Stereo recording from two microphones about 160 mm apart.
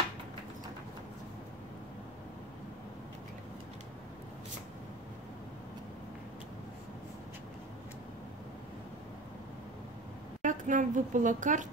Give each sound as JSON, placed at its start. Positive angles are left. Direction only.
{"t": 10.4, "sound": "a woman's voice", "side_deg": -55}